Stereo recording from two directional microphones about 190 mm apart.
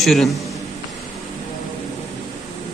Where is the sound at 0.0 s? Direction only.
Centre (ahead or behind).